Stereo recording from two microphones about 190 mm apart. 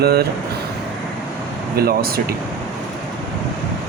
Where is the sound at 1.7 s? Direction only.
50° right (ahead or behind).